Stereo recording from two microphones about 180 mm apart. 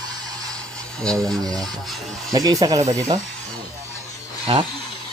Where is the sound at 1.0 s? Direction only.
5° left (ahead or behind).